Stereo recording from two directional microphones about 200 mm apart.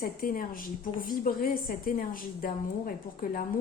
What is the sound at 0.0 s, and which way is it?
A woman's voice, 45° left (ahead or behind).